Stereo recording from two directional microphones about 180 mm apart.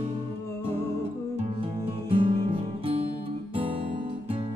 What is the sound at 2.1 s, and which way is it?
Music, 30° right (ahead or behind).